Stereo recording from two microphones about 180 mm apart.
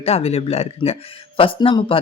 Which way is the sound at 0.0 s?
35° left (ahead or behind).